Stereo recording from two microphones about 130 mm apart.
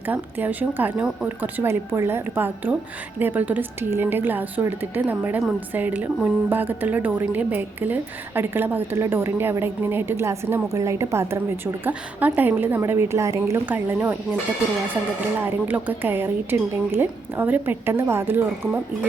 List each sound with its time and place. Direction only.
0.0 s a woman's voice: 15° right (ahead or behind)
15.4 s a woman's voice: 15° right (ahead or behind)